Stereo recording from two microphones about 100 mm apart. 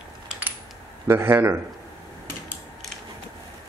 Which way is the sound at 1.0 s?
25° right (ahead or behind).